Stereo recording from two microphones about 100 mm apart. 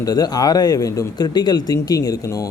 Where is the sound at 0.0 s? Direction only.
40° left (ahead or behind).